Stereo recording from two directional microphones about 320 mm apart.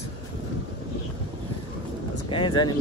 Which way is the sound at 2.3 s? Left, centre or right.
Centre.